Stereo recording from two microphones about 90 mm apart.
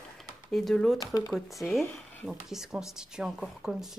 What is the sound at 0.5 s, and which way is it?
Speech, 5° left (ahead or behind).